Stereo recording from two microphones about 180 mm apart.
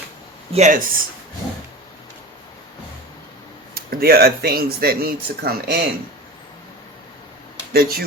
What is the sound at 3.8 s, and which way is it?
Speech, 60° right (ahead or behind).